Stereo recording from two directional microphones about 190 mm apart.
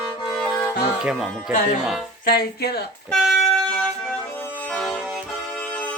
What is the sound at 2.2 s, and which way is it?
Speech, 55° left (ahead or behind).